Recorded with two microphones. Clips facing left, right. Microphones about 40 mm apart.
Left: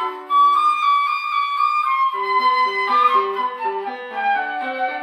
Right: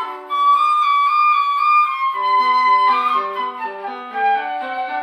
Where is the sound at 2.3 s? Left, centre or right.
Centre.